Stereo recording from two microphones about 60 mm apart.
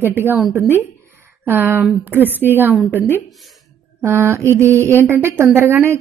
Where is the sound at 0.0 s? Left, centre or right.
Right.